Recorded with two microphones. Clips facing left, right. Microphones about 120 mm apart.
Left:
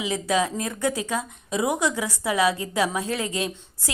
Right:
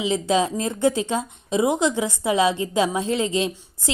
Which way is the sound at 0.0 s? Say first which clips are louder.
Right 3 dB; 25° right (ahead or behind).